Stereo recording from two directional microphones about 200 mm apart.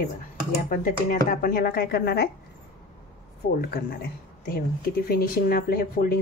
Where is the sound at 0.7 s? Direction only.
45° left (ahead or behind).